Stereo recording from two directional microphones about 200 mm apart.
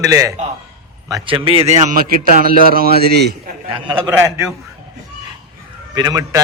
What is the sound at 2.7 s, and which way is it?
Speech, 50° right (ahead or behind).